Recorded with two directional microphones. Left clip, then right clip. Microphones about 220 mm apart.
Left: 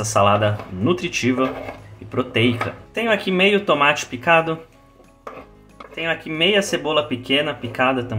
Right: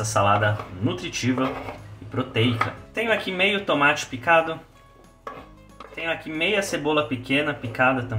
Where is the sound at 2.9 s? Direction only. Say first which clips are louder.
Left 6 dB; 40° left (ahead or behind).